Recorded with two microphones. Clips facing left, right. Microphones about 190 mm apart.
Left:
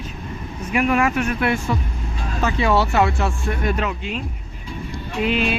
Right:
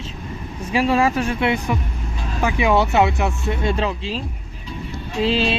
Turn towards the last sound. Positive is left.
turn(degrees=-30)  # may be behind; listen again after turning